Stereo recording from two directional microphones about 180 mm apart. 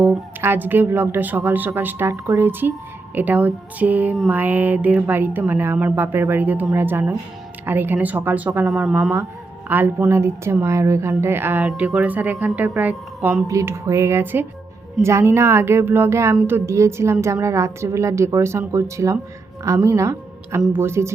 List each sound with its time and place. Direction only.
0.0 s a woman's voice: 10° right (ahead or behind)